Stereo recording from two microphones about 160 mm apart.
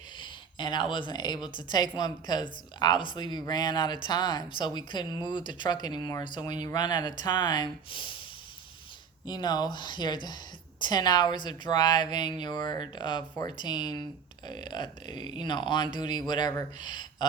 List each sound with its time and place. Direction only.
0.2 s speech: 30° left (ahead or behind)
9.2 s speech: 25° left (ahead or behind)